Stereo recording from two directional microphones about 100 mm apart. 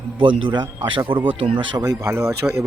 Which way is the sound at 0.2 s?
55° right (ahead or behind).